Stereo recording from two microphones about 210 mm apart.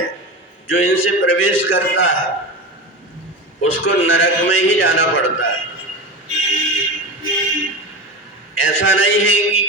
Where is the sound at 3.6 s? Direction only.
70° left (ahead or behind).